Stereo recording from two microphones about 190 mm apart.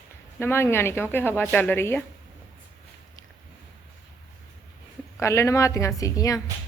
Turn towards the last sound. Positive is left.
turn(degrees=20)  # may be behind; listen again after turning